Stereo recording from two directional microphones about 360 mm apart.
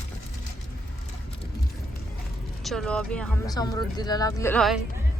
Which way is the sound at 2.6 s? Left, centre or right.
Centre.